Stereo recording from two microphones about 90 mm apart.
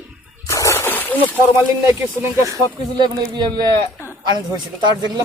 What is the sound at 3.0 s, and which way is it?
Speech, 55° right (ahead or behind).